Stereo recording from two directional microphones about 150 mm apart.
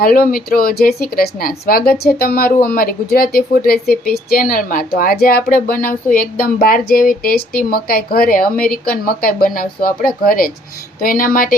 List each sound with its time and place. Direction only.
0.0 s speech: 75° left (ahead or behind)
8.5 s a woman's voice: 5° left (ahead or behind)
8.9 s speech: 75° left (ahead or behind)